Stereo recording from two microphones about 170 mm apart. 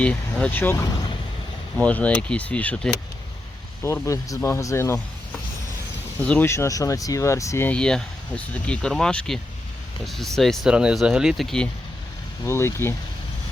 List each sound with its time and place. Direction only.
0.0 s speech: 5° left (ahead or behind)
3.8 s speech: 15° left (ahead or behind)
12.5 s speech: 15° left (ahead or behind)